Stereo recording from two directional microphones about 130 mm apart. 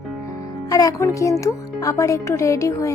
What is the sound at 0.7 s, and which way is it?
Speech, 25° left (ahead or behind).